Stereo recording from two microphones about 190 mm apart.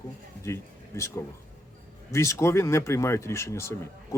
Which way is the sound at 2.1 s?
15° left (ahead or behind).